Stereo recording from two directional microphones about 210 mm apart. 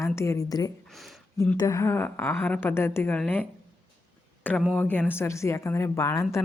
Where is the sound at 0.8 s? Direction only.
Centre (ahead or behind).